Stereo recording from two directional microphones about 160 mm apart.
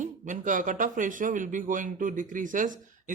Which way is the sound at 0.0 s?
55° right (ahead or behind).